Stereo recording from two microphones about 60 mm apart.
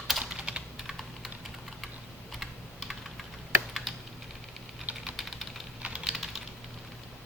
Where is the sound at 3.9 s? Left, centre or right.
Centre.